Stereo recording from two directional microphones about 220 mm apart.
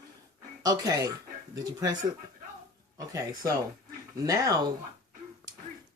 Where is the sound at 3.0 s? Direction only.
15° right (ahead or behind).